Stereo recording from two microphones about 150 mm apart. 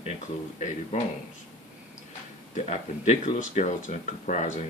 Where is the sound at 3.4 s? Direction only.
55° left (ahead or behind).